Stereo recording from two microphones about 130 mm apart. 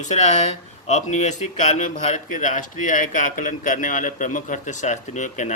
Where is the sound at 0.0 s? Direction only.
65° left (ahead or behind).